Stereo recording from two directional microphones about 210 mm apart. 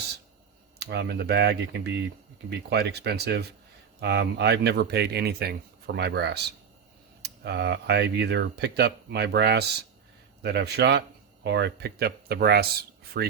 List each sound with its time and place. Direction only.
0.8 s speech: 50° right (ahead or behind)